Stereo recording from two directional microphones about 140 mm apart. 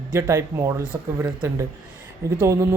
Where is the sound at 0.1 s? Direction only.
20° right (ahead or behind).